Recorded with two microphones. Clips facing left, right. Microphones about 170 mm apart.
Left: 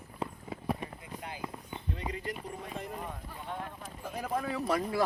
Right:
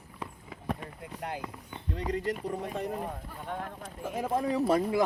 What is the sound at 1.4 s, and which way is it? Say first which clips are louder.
Run: even; 10° left (ahead or behind).